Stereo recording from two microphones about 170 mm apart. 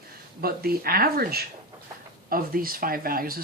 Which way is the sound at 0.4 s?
60° right (ahead or behind).